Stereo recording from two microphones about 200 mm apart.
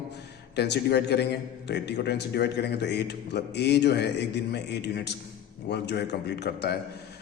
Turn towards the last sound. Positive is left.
turn(degrees=55)  # may be behind; listen again after turning